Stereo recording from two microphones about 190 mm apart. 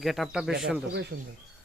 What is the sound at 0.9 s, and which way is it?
Speech, 60° right (ahead or behind).